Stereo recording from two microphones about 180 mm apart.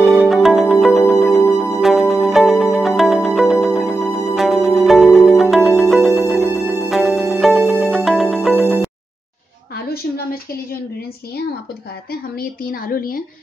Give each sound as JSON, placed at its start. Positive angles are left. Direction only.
{"t": 0.0, "sound": "music", "side_deg": 0}
{"t": 9.8, "sound": "a sound", "side_deg": 55}
{"t": 12.1, "sound": "a woman's voice", "side_deg": 55}